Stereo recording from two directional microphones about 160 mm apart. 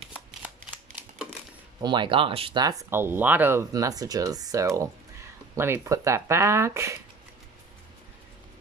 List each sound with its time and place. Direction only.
0.4 s a sound: 5° right (ahead or behind)
1.8 s speech: 30° right (ahead or behind)
2.6 s speech: 20° right (ahead or behind)